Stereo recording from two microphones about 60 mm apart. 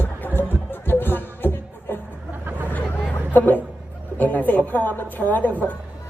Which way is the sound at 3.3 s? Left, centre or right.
Left.